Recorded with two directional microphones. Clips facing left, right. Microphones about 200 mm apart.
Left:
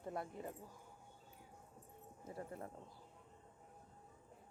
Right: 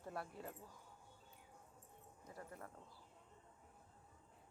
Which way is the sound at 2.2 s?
25° left (ahead or behind).